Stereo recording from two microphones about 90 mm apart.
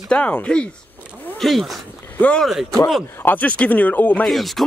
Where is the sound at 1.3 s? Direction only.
Centre (ahead or behind).